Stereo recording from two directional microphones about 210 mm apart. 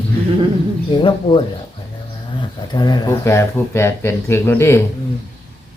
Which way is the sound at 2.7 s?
20° left (ahead or behind).